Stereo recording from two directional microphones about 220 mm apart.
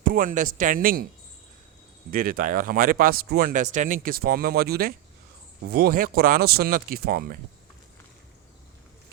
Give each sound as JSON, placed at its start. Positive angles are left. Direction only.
{"t": 0.0, "sound": "speech", "side_deg": -40}
{"t": 2.0, "sound": "speech", "side_deg": -40}